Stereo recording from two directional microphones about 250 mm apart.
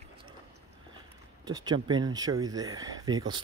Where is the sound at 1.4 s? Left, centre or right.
Centre.